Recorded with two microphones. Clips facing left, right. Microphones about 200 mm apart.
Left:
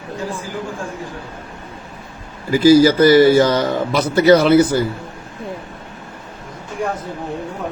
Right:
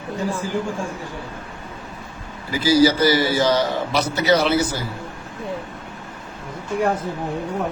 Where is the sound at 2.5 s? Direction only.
50° left (ahead or behind).